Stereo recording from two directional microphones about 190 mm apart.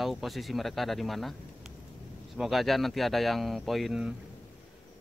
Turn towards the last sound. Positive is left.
turn(degrees=-5)  # may be behind; listen again after turning